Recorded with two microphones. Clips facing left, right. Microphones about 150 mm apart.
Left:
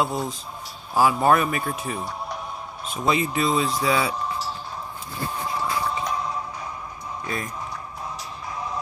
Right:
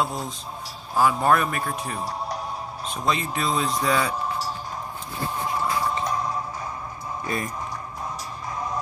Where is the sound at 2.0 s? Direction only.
35° right (ahead or behind).